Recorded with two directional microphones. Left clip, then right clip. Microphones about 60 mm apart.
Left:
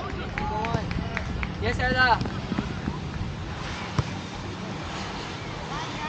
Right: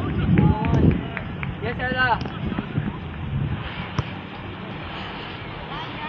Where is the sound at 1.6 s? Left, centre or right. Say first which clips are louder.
Even; left.